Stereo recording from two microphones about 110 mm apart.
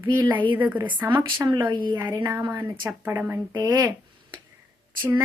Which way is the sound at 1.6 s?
45° right (ahead or behind).